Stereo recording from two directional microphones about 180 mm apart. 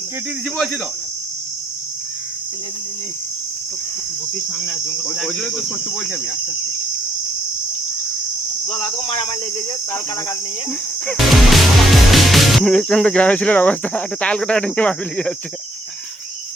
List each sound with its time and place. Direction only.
4.6 s cricket: 5° left (ahead or behind)
8.7 s speech: 35° left (ahead or behind)
10.7 s music: 5° left (ahead or behind)